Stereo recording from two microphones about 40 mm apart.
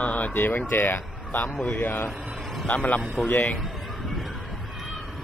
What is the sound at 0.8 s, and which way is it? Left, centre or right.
Speech, left.